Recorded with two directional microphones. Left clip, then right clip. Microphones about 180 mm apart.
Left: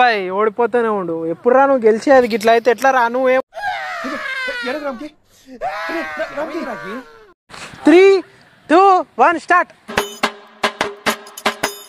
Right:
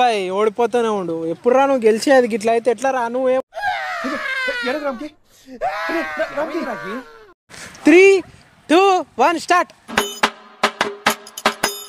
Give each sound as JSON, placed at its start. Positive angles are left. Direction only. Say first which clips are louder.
{"t": 0.0, "sound": "speech", "louder": "left 2 dB", "side_deg": -20}
{"t": 2.2, "sound": "speech", "louder": "left 4 dB", "side_deg": -10}
{"t": 9.9, "sound": "music", "louder": "right 1 dB", "side_deg": 0}